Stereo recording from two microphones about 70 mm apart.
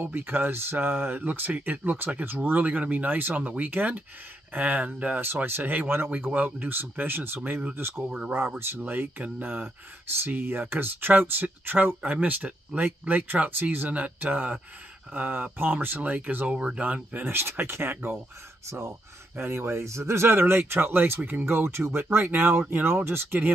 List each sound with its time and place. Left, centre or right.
0.0 s speech: right
7.9 s speech: centre
8.3 s speech: right